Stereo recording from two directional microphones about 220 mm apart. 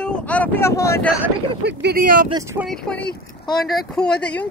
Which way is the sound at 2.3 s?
15° right (ahead or behind).